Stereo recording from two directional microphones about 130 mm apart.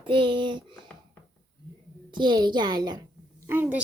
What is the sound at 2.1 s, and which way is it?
Speech, 35° right (ahead or behind).